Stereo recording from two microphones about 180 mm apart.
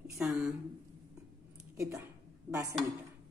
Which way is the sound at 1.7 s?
15° right (ahead or behind).